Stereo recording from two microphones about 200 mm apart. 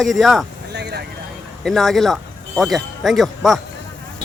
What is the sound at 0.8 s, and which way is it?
Vehicle, 55° right (ahead or behind).